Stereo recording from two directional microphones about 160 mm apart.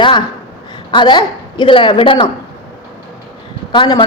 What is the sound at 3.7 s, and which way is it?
Speech, 30° left (ahead or behind).